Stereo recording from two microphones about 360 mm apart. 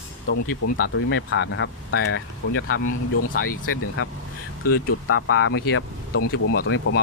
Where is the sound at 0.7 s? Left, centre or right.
Left.